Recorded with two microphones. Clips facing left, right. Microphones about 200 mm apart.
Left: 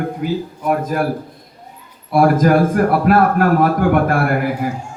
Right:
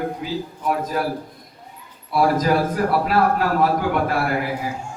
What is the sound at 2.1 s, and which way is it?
A man's voice, 50° left (ahead or behind).